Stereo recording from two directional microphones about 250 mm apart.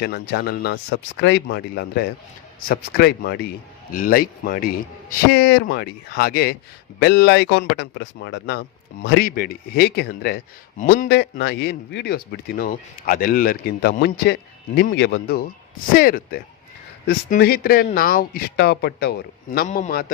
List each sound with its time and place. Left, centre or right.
0.0 s a man's voice: left